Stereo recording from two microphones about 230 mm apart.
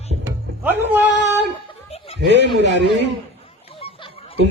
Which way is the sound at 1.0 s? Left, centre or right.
Right.